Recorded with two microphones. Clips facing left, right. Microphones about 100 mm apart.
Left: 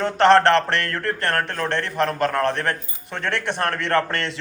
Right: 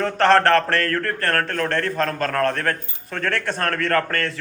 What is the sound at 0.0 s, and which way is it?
A man's voice, 20° left (ahead or behind).